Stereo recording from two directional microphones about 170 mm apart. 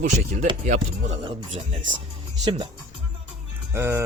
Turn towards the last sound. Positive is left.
turn(degrees=-15)  # may be behind; listen again after turning